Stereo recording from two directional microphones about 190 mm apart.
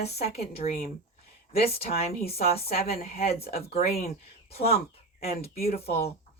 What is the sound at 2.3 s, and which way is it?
Speech, 30° left (ahead or behind).